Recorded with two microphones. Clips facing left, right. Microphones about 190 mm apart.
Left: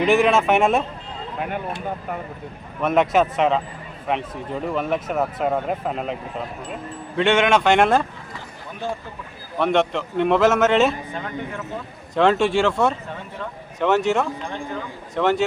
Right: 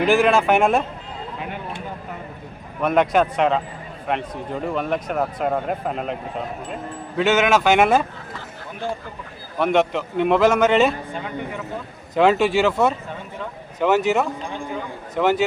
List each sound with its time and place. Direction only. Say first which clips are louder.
0.0 s speech: even; centre (ahead or behind)
2.8 s speech: even; centre (ahead or behind)
7.2 s speech: even; 5° right (ahead or behind)
9.6 s speech: right 1 dB; centre (ahead or behind)